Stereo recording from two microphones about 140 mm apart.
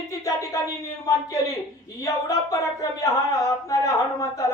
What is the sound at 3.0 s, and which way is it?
Speech, 25° left (ahead or behind).